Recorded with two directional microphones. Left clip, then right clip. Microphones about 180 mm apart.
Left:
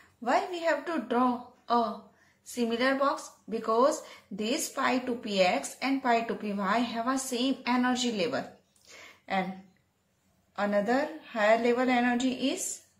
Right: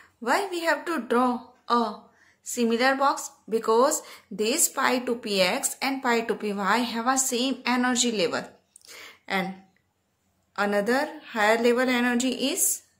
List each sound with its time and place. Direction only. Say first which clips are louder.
0.2 s speech: right 3 dB; 30° right (ahead or behind)
10.5 s speech: right 3 dB; 30° right (ahead or behind)